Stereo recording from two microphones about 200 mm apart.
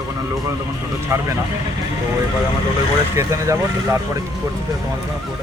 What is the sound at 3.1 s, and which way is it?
Speech, 15° right (ahead or behind).